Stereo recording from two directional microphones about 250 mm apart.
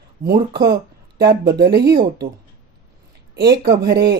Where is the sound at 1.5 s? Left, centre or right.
Right.